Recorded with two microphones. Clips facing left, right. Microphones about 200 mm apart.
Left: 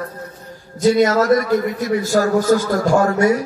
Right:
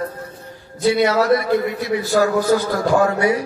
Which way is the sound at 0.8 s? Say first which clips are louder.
Left 2 dB; 45° left (ahead or behind).